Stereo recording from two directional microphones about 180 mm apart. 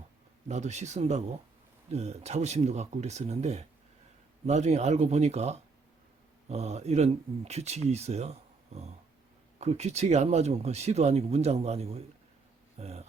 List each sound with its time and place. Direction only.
0.4 s speech: 40° right (ahead or behind)